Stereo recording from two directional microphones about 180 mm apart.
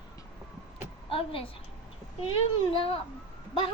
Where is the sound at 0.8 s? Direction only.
30° left (ahead or behind).